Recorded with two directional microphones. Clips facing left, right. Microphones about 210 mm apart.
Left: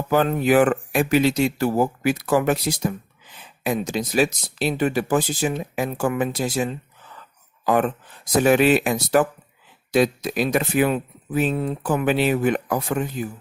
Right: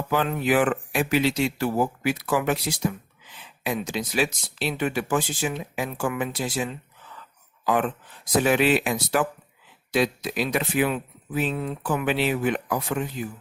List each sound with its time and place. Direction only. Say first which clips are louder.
0.1 s speech: left 5 dB; 45° left (ahead or behind)